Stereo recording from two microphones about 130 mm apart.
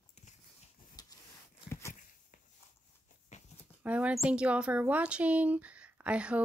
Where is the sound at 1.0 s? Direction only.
30° left (ahead or behind).